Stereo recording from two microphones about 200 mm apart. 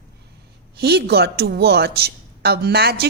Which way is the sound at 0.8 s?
55° right (ahead or behind).